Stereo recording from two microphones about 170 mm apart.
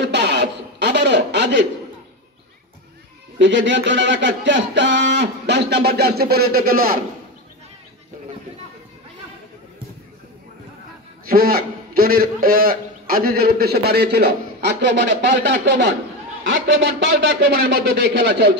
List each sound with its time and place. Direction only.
0.0 s a sound: 90° right
3.3 s speech: 90° right; by 7.0 s 60° right (ahead or behind)
11.2 s a man's voice: 60° right (ahead or behind); by 15.9 s 90° right
17.3 s a man's voice: 70° right (ahead or behind); by 18.5 s 85° right